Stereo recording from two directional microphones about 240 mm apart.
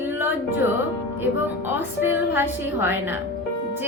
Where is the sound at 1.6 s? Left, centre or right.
Centre.